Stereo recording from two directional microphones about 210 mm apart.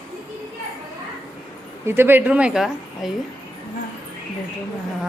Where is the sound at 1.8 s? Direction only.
10° right (ahead or behind).